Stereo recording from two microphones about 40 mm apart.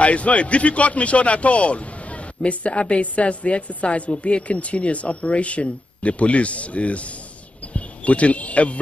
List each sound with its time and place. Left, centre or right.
0.0 s speech: left